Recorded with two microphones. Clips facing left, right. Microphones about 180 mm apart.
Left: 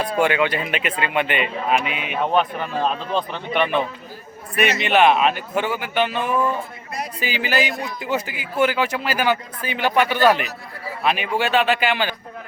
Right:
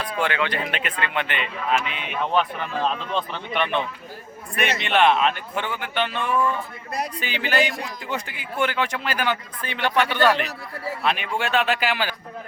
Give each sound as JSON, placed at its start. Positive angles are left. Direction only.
{"t": 0.2, "sound": "speech", "side_deg": 10}
{"t": 2.6, "sound": "speech", "side_deg": 35}
{"t": 3.2, "sound": "speech", "side_deg": 0}